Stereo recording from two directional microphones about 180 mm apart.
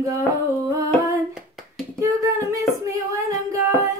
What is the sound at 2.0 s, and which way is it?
Female singing, 15° right (ahead or behind).